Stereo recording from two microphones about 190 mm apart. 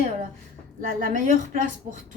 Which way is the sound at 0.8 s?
45° right (ahead or behind).